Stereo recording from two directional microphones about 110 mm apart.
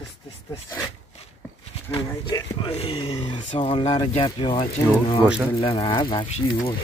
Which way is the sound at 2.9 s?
50° left (ahead or behind).